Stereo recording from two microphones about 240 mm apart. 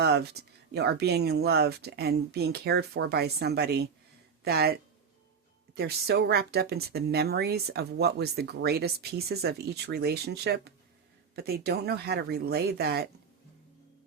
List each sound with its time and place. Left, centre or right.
0.0 s speech: right